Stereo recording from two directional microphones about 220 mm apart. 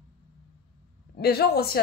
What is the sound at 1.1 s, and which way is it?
Speech, 45° left (ahead or behind).